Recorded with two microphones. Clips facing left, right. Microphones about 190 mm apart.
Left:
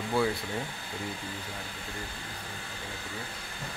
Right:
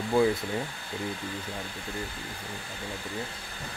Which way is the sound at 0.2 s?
15° right (ahead or behind).